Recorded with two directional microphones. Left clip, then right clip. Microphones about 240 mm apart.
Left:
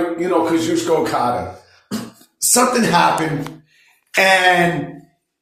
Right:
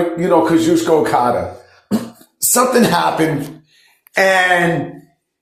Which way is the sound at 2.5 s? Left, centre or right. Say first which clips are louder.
Right 2 dB; right.